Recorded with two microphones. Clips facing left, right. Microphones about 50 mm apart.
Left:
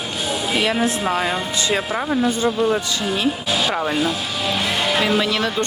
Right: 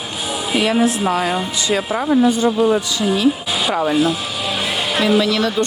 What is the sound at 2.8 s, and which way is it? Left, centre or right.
Speech, left.